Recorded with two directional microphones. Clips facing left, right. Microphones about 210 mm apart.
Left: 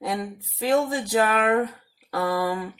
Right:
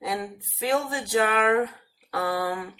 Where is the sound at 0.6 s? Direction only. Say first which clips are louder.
Left 4 dB; 35° left (ahead or behind).